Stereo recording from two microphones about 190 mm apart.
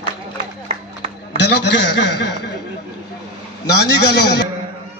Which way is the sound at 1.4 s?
60° left (ahead or behind).